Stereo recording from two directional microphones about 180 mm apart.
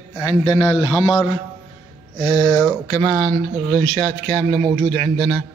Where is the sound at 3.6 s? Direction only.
10° left (ahead or behind).